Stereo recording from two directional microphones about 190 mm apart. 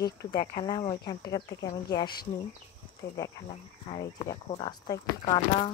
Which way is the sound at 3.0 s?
65° left (ahead or behind).